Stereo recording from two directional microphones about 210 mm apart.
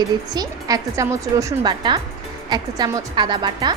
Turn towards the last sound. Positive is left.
turn(degrees=-20)  # may be behind; listen again after turning